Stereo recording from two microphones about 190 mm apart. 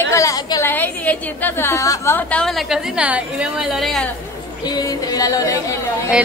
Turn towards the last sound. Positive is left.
turn(degrees=15)  # may be behind; listen again after turning